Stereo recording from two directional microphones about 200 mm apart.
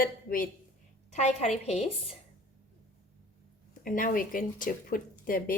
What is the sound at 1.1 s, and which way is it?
A woman's voice, 35° left (ahead or behind).